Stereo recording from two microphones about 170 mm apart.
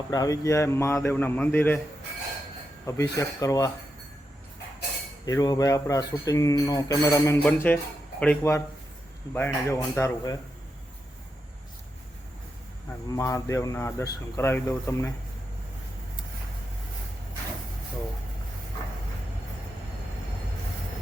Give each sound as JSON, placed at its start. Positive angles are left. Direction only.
{"t": 0.1, "sound": "speech", "side_deg": 20}
{"t": 2.8, "sound": "speech", "side_deg": 20}
{"t": 5.2, "sound": "speech", "side_deg": 20}
{"t": 13.1, "sound": "speech", "side_deg": 20}